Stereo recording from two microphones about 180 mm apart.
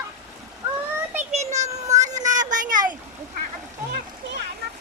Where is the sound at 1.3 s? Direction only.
40° right (ahead or behind).